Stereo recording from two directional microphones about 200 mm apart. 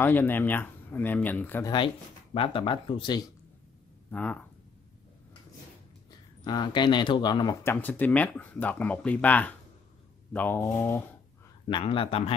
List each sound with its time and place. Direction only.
0.0 s speech: 10° left (ahead or behind)
2.3 s speech: 25° left (ahead or behind)
4.1 s speech: 5° left (ahead or behind)
6.4 s speech: 20° left (ahead or behind)
11.7 s speech: 25° left (ahead or behind)